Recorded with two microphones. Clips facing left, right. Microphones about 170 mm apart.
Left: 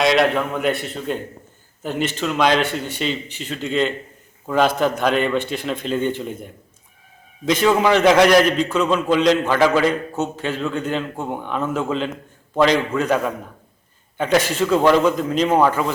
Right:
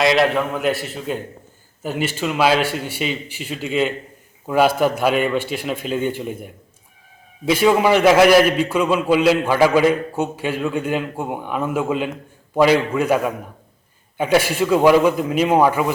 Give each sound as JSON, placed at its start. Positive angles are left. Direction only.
{"t": 0.0, "sound": "a man's voice", "side_deg": 0}